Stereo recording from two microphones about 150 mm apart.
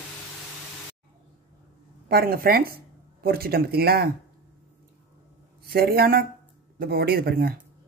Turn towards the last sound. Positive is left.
turn(degrees=-85)